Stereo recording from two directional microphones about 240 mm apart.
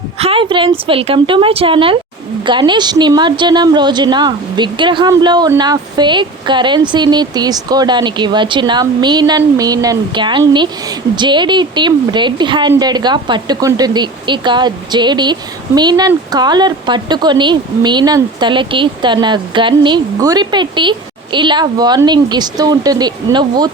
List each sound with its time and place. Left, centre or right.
0.2 s a woman's voice: right